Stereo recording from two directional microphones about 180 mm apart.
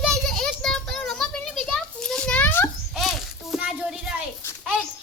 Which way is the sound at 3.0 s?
Centre (ahead or behind).